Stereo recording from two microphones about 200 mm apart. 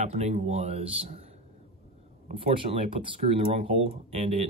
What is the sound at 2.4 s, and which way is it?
Speech, 25° right (ahead or behind).